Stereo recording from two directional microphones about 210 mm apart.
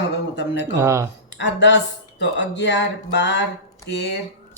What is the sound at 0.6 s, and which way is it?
Speech, 15° right (ahead or behind).